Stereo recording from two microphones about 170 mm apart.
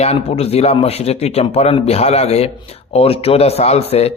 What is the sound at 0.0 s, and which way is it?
Speech, 35° left (ahead or behind).